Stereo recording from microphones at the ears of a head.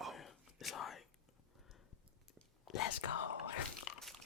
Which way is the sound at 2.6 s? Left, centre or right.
Left.